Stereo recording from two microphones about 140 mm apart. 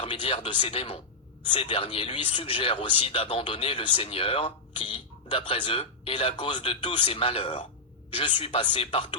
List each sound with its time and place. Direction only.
0.0 s speech: 40° left (ahead or behind)